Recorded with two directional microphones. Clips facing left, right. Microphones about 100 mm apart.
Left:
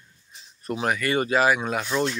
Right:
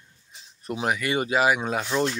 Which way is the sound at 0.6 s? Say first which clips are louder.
Left 1 dB; 15° right (ahead or behind).